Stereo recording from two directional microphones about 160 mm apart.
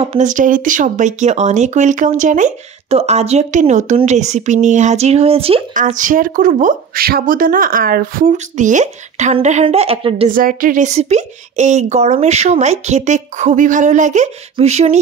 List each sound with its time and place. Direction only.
0.0 s speech: 45° right (ahead or behind)
5.8 s speech: 55° right (ahead or behind); by 10.3 s 35° right (ahead or behind)
10.3 s speech: 60° right (ahead or behind); by 15.0 s 40° right (ahead or behind)